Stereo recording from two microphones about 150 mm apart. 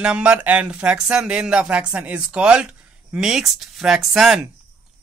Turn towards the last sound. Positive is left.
turn(degrees=-5)  # may be behind; listen again after turning